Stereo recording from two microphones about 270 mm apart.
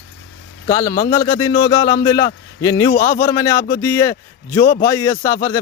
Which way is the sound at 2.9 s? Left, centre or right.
Left.